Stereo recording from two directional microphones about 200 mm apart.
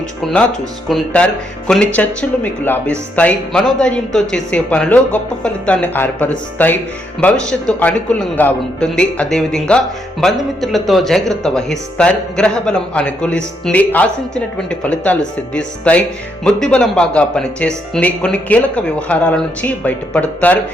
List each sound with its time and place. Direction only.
0.9 s speech: 5° left (ahead or behind)